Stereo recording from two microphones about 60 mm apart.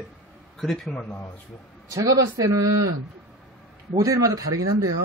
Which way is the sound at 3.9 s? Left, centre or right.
Right.